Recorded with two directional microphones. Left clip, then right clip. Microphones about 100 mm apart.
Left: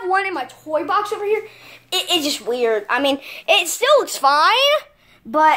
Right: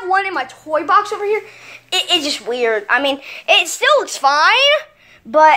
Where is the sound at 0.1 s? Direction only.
25° left (ahead or behind).